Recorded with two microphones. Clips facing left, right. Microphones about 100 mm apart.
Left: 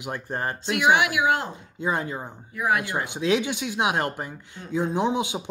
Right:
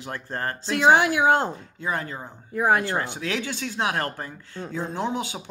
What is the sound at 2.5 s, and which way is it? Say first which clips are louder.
Speech: right 3 dB; 35° right (ahead or behind).